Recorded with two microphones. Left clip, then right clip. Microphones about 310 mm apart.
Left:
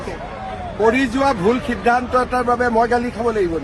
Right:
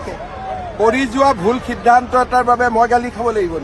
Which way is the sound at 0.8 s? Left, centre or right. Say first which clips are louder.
Right 3 dB; right.